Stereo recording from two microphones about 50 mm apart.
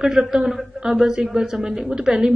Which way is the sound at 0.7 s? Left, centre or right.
Centre.